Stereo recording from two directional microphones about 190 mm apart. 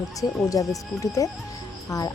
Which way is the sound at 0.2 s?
15° left (ahead or behind).